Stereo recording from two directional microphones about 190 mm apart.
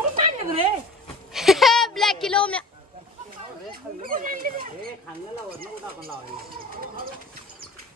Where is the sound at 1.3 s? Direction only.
Centre (ahead or behind).